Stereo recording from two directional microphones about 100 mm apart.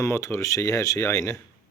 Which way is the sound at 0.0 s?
30° left (ahead or behind).